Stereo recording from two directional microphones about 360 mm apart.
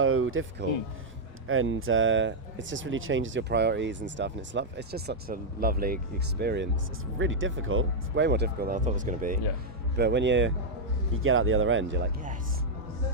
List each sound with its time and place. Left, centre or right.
0.0 s speech: right